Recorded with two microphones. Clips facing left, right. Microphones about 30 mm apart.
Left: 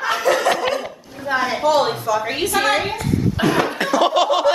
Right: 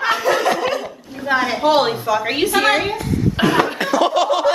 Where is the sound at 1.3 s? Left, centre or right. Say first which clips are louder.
Even; centre.